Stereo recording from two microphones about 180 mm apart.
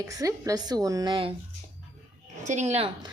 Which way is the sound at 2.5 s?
40° right (ahead or behind).